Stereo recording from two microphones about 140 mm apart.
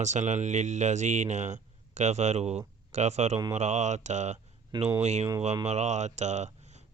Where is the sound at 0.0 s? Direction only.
55° right (ahead or behind).